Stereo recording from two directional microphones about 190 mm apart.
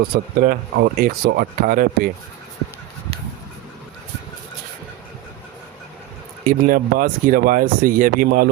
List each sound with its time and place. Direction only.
0.3 s speech: 50° right (ahead or behind)
6.4 s speech: 50° right (ahead or behind)